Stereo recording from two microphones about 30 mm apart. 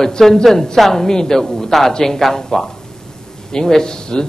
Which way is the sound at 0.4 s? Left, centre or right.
Centre.